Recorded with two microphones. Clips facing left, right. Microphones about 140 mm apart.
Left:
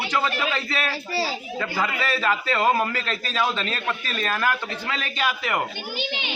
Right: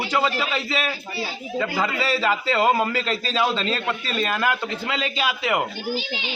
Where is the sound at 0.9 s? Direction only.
90° left.